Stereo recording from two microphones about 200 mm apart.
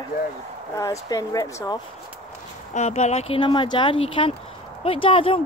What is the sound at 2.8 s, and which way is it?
Speech, 35° left (ahead or behind).